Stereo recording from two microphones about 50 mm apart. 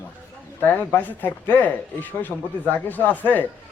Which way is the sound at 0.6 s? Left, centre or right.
Left.